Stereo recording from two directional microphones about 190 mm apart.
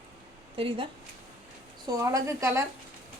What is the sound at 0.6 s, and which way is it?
Speech, 30° right (ahead or behind).